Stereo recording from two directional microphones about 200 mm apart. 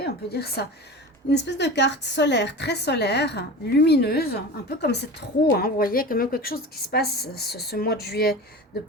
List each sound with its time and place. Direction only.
0.0 s a woman's voice: 50° left (ahead or behind)